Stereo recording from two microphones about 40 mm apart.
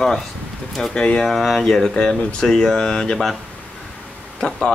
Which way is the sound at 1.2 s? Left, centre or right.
Centre.